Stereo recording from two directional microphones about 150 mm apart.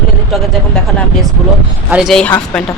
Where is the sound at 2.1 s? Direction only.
10° left (ahead or behind).